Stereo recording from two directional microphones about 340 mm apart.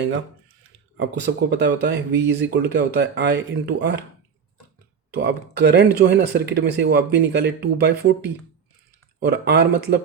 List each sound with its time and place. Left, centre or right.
0.9 s speech: right
5.1 s speech: right
9.2 s speech: right